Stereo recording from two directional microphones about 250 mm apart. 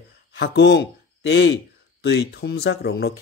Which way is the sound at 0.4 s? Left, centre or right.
Left.